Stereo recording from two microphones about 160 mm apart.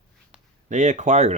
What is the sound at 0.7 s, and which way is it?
Speech, 50° right (ahead or behind).